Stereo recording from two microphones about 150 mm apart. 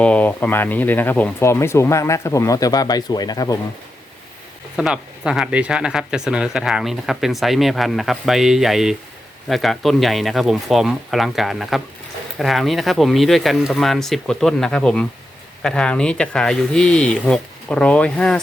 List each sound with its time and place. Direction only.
0.0 s speech: 10° left (ahead or behind); by 3.6 s 25° left (ahead or behind)
4.8 s speech: 5° right (ahead or behind)